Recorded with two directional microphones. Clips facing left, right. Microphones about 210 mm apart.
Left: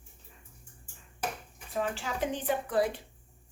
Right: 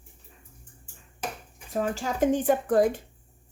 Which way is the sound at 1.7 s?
40° right (ahead or behind).